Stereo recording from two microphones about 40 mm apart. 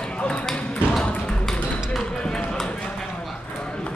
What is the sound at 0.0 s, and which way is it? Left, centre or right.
Ping, left.